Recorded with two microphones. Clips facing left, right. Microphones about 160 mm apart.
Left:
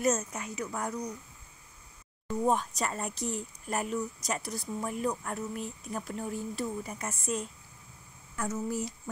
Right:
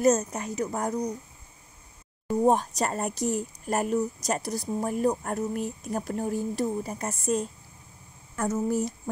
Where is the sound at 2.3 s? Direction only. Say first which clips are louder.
Right 6 dB; 35° right (ahead or behind).